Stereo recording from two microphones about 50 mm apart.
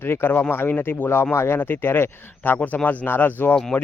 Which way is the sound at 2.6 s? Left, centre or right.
Left.